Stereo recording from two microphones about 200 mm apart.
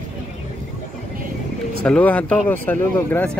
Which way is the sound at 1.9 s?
5° left (ahead or behind).